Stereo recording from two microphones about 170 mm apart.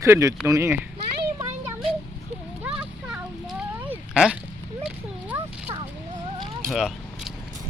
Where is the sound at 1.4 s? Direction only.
15° right (ahead or behind).